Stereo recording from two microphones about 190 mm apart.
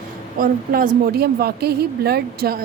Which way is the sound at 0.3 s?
50° right (ahead or behind).